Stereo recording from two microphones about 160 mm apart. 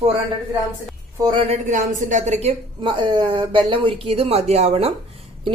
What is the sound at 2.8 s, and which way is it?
A woman's voice, 30° right (ahead or behind).